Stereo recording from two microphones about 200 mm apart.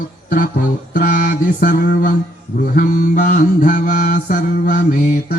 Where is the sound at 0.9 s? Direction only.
45° left (ahead or behind).